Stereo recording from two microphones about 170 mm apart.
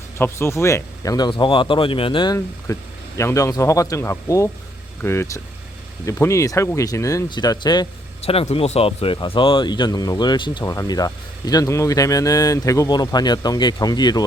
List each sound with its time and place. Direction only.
0.2 s speech: 15° left (ahead or behind)
8.2 s speech: 35° left (ahead or behind)